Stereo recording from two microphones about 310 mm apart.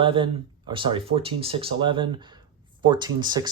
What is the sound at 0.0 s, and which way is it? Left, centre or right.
Speech, centre.